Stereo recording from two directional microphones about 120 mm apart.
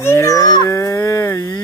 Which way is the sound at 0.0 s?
25° left (ahead or behind).